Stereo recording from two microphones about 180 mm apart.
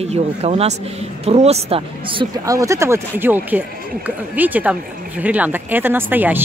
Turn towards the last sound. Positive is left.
turn(degrees=-10)  # may be behind; listen again after turning